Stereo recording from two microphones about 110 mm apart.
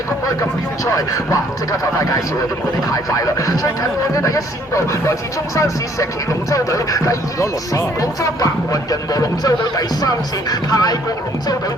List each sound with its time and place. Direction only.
0.9 s a man's voice: 30° left (ahead or behind)